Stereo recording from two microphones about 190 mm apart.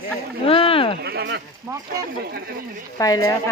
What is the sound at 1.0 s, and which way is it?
Speech, 60° right (ahead or behind).